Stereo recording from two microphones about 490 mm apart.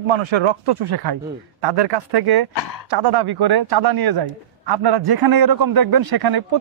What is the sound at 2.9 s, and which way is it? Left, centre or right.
A man's voice, right.